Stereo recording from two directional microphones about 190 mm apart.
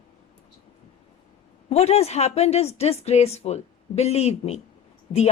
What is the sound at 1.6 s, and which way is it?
A woman's voice, 35° left (ahead or behind).